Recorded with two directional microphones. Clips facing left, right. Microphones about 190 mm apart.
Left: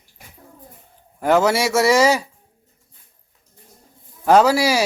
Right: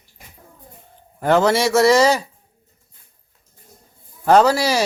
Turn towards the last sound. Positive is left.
turn(degrees=10)  # may be behind; listen again after turning